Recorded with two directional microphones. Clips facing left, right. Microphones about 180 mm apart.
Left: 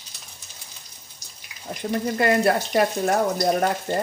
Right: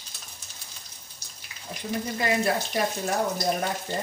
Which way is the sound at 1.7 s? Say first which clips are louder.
Left 5 dB; 50° left (ahead or behind).